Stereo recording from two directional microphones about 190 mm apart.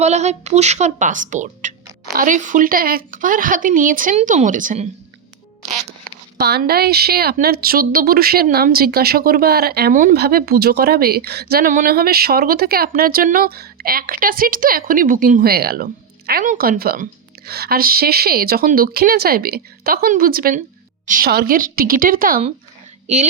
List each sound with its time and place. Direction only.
0.0 s a woman's voice: 35° right (ahead or behind)
6.3 s a woman's voice: 60° right (ahead or behind)
23.0 s a woman's voice: 35° right (ahead or behind)